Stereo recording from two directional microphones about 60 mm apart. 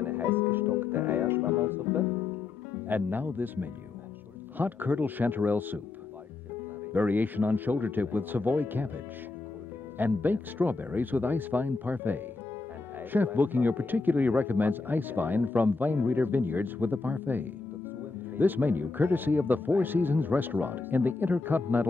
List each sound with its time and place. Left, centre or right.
0.0 s music: right
2.9 s speech: right
6.9 s speech: right
9.9 s speech: right